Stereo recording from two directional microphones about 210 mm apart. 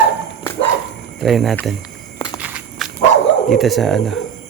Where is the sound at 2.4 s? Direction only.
5° right (ahead or behind).